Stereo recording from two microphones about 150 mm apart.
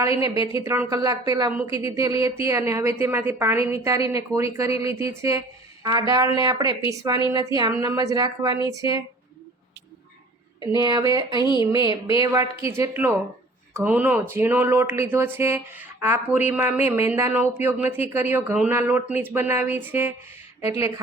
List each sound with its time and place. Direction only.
0.2 s a woman's voice: 20° right (ahead or behind)
10.7 s a woman's voice: 25° right (ahead or behind)